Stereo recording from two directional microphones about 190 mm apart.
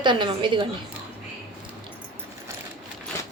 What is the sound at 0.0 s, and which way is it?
Speech, 25° right (ahead or behind).